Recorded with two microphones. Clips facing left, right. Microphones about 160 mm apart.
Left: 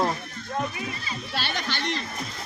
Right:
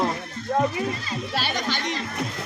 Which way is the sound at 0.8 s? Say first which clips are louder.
Right 6 dB; 45° right (ahead or behind).